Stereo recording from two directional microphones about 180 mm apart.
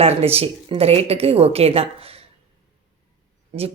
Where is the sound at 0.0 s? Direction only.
35° right (ahead or behind).